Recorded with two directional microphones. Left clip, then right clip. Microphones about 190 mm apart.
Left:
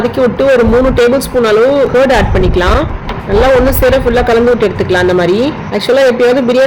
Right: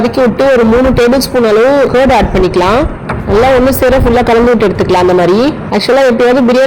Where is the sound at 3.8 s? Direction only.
20° right (ahead or behind).